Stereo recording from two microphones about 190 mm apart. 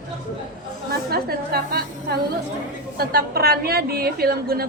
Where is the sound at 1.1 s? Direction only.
55° right (ahead or behind).